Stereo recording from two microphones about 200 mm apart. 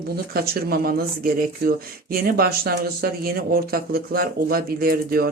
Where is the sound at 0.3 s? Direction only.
50° right (ahead or behind).